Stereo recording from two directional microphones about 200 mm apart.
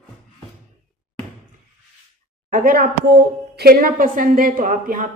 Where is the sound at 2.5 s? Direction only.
45° right (ahead or behind).